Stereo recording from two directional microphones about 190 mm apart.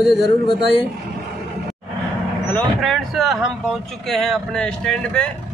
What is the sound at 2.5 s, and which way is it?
A man's voice, centre (ahead or behind).